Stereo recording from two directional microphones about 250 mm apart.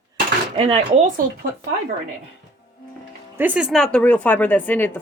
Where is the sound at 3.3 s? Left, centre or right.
Centre.